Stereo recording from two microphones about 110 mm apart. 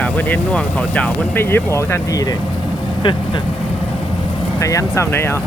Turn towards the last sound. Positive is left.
turn(degrees=20)  # may be behind; listen again after turning